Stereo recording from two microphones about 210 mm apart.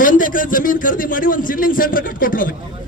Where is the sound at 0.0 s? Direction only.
40° left (ahead or behind).